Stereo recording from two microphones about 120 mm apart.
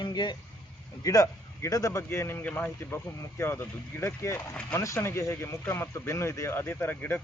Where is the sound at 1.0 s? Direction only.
30° left (ahead or behind).